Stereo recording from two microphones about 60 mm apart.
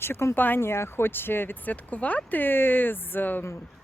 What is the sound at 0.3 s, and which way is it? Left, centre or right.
Speech, left.